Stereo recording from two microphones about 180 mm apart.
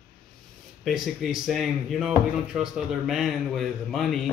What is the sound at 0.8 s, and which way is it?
Speech, centre (ahead or behind).